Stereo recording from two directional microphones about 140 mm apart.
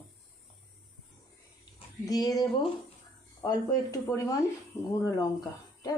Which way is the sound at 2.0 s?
25° left (ahead or behind).